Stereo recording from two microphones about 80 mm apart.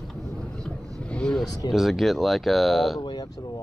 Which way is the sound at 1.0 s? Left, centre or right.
Centre.